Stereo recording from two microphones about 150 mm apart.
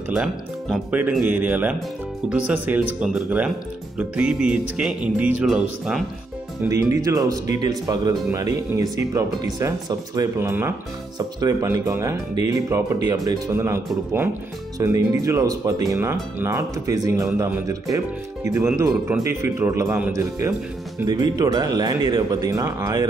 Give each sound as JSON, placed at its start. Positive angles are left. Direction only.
{"t": 0.1, "sound": "speech", "side_deg": 0}
{"t": 6.7, "sound": "speech", "side_deg": -20}